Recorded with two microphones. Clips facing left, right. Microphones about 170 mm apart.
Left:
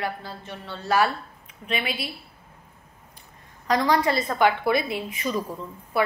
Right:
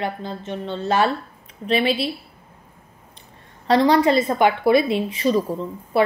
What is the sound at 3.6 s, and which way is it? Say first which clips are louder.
A woman's voice: right 6 dB; 25° right (ahead or behind).